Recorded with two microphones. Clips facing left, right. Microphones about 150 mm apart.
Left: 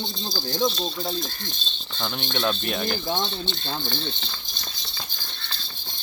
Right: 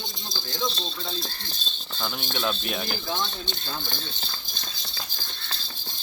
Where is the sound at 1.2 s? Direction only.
30° right (ahead or behind).